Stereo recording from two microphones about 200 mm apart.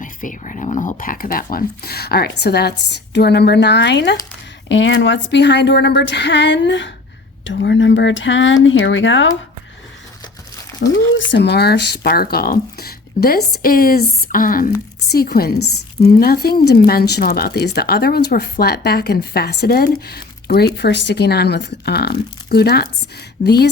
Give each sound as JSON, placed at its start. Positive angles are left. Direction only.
{"t": 0.0, "sound": "a woman's voice", "side_deg": 40}
{"t": 10.8, "sound": "a woman's voice", "side_deg": 55}
{"t": 11.2, "sound": "speech", "side_deg": 65}
{"t": 15.5, "sound": "a woman's voice", "side_deg": 90}
{"t": 16.2, "sound": "a woman's voice", "side_deg": 50}